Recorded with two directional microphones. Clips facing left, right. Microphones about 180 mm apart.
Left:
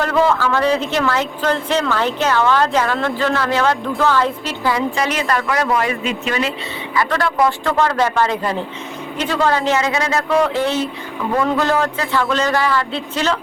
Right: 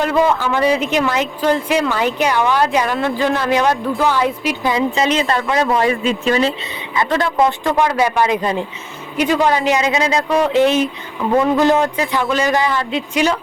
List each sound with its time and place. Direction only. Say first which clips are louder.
0.0 s a woman's voice: right 1 dB; 15° right (ahead or behind); by 6.5 s 35° right (ahead or behind)
6.9 s a woman's voice: right 1 dB; 20° right (ahead or behind)